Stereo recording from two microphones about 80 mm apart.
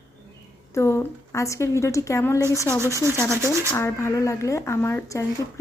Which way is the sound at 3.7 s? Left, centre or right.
Left.